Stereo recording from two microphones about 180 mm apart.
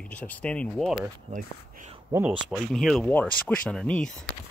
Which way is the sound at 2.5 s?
Centre (ahead or behind).